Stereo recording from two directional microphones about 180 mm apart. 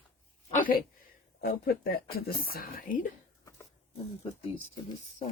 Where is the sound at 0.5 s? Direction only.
50° left (ahead or behind).